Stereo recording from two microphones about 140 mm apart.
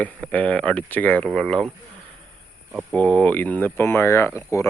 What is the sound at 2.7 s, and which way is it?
Speech, 10° left (ahead or behind).